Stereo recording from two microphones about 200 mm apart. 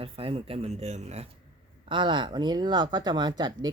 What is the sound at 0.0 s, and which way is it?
Speech, 30° right (ahead or behind).